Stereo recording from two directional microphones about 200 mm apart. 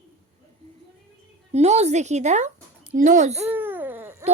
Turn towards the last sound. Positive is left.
turn(degrees=-10)  # may be behind; listen again after turning